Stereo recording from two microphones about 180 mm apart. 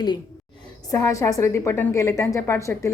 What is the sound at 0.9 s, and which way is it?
A woman's voice, 20° left (ahead or behind).